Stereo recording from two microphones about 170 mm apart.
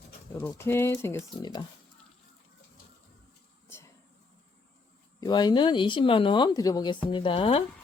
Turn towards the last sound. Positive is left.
turn(degrees=30)  # may be behind; listen again after turning